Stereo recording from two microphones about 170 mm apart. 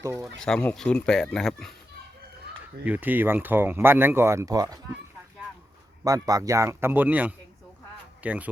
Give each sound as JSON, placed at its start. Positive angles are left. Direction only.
{"t": 0.2, "sound": "speech", "side_deg": 5}
{"t": 2.8, "sound": "speech", "side_deg": -10}
{"t": 6.1, "sound": "speech", "side_deg": -20}